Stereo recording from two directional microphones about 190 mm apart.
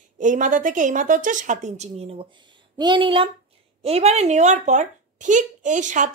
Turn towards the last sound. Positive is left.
turn(degrees=-40)  # may be behind; listen again after turning